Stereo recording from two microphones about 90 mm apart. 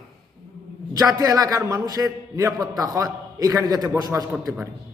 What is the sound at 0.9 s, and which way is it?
A man's voice, 45° right (ahead or behind).